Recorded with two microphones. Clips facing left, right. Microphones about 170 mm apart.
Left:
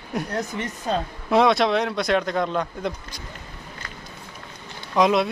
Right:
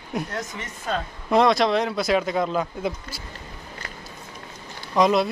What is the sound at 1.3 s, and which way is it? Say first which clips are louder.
Speech: even; centre (ahead or behind).